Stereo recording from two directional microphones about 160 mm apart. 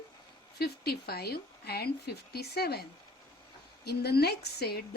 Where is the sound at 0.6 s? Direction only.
80° left.